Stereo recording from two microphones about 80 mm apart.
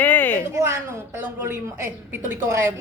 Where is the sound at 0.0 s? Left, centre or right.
Left.